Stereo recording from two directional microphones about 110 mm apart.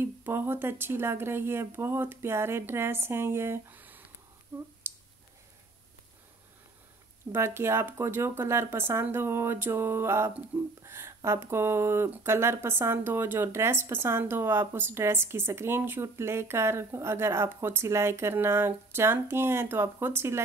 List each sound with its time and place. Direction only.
0.0 s speech: 20° right (ahead or behind)
4.8 s a sound: 20° right (ahead or behind)
7.3 s speech: 20° right (ahead or behind)